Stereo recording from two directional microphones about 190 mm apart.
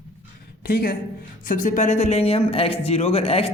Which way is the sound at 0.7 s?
50° left (ahead or behind).